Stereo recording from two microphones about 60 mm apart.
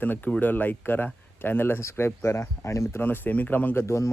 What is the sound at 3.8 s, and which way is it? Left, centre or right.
Speech, left.